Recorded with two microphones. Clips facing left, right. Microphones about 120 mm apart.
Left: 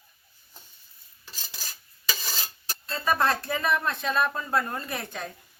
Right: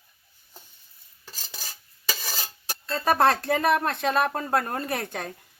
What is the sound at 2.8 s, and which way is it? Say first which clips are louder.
Speech: right 4 dB; 65° right (ahead or behind).